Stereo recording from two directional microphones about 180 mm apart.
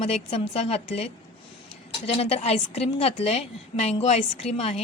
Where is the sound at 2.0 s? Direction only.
35° left (ahead or behind).